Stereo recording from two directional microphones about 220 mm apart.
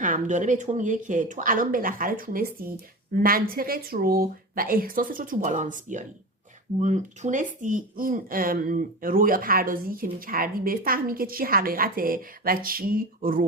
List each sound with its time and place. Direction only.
0.0 s speech: 35° right (ahead or behind)